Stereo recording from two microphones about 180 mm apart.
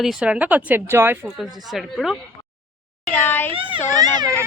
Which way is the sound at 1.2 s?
Centre (ahead or behind).